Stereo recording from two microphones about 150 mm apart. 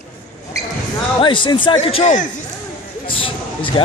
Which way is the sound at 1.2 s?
35° left (ahead or behind).